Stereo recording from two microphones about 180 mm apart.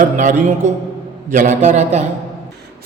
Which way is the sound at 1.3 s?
45° right (ahead or behind).